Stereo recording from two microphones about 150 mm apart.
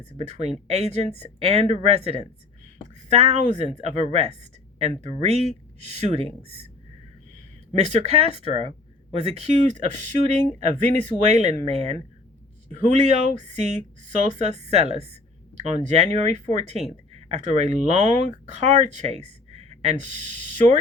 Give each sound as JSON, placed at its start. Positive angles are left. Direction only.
{"t": 0.0, "sound": "a woman's voice", "side_deg": -45}
{"t": 7.7, "sound": "a woman's voice", "side_deg": -50}